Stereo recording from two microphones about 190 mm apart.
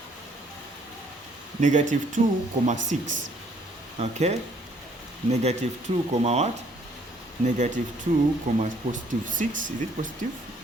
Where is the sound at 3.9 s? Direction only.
35° right (ahead or behind).